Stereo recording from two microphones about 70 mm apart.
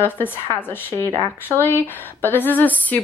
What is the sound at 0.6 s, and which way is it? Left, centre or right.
Speech, left.